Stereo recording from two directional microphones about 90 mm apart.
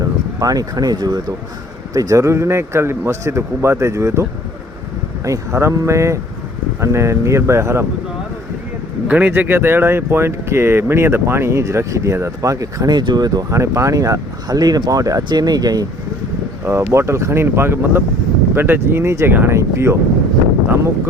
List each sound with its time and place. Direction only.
0.0 s a man's voice: 45° right (ahead or behind)
9.0 s speech: 15° right (ahead or behind); by 13.4 s 50° right (ahead or behind)
13.5 s a man's voice: 35° right (ahead or behind)
16.6 s speech: 30° right (ahead or behind)